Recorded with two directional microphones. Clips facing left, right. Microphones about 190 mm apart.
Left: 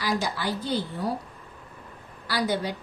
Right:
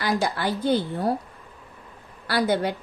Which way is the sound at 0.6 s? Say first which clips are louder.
Right 6 dB; 55° right (ahead or behind).